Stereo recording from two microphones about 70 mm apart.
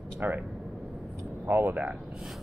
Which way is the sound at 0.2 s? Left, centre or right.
Right.